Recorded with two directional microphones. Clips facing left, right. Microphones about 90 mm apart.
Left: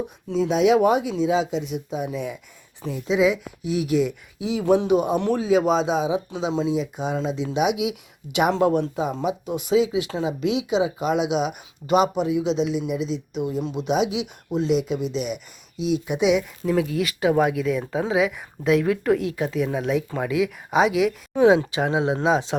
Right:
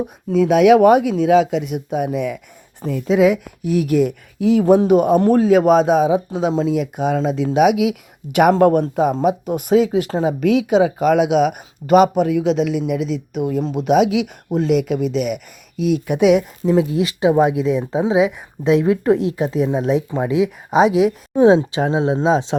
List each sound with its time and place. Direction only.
0.3 s speech: 55° right (ahead or behind)
6.5 s speech: 45° right (ahead or behind)
6.7 s speech: 60° right (ahead or behind)
16.6 s speech: 25° right (ahead or behind)